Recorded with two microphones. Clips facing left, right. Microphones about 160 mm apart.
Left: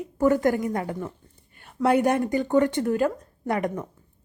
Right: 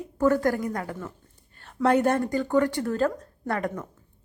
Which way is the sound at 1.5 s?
10° left (ahead or behind).